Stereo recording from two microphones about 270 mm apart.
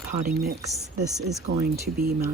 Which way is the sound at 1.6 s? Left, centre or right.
Right.